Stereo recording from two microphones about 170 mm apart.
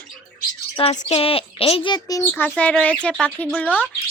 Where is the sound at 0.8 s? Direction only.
35° left (ahead or behind).